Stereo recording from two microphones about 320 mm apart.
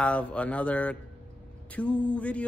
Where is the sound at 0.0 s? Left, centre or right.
Centre.